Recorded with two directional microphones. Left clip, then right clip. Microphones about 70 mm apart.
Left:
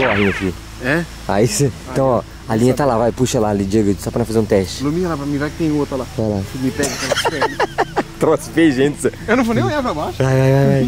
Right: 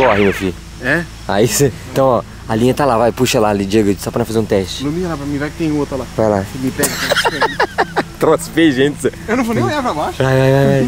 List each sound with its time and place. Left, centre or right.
0.0 s speech: centre
1.4 s speech: right
2.0 s speech: centre
3.2 s speech: centre
3.4 s speech: centre
4.1 s speech: centre
6.8 s speech: right
9.3 s speech: centre
10.1 s speech: centre